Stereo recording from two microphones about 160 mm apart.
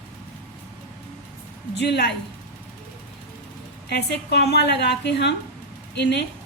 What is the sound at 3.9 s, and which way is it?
A woman's voice, 90° left.